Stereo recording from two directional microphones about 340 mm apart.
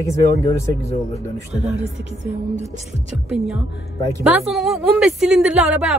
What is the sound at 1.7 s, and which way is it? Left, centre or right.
Speech, right.